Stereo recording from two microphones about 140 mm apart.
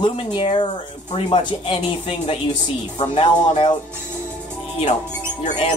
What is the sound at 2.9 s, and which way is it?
Speech, 40° left (ahead or behind).